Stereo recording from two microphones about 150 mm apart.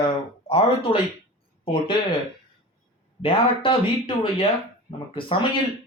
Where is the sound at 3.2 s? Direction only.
35° left (ahead or behind).